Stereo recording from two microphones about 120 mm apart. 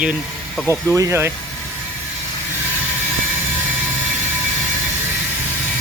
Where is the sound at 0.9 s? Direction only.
20° right (ahead or behind).